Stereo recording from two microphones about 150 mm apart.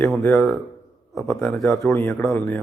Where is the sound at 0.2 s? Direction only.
10° left (ahead or behind).